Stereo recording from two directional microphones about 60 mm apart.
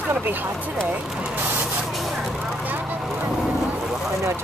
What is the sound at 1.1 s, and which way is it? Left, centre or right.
Speech, centre.